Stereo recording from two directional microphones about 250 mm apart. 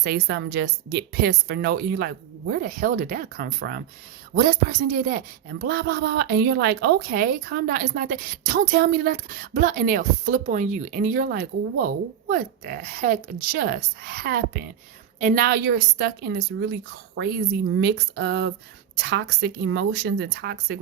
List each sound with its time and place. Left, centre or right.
0.0 s speech: right
17.7 s speech: right